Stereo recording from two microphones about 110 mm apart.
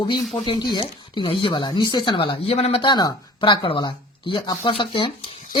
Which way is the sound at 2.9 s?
40° left (ahead or behind).